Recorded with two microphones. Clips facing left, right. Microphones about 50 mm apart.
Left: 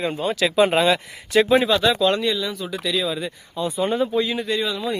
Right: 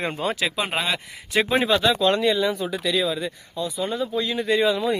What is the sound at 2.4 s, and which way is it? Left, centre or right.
Speech, right.